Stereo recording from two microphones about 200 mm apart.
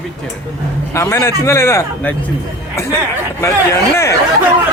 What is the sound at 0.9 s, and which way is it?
A man's voice, 15° left (ahead or behind).